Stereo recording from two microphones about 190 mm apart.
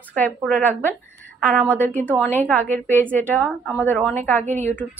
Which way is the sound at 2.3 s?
10° left (ahead or behind).